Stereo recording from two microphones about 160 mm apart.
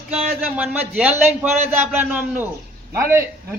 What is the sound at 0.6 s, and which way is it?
Speech, 5° right (ahead or behind).